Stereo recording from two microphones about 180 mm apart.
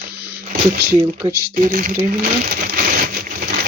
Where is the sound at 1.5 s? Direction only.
50° right (ahead or behind).